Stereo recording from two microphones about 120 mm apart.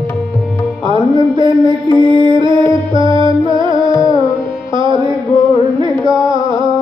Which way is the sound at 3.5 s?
40° right (ahead or behind).